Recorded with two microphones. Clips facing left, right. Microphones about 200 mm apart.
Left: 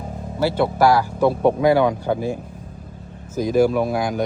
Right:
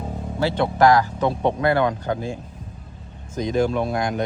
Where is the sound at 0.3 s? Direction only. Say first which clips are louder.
Left 1 dB; 5° left (ahead or behind).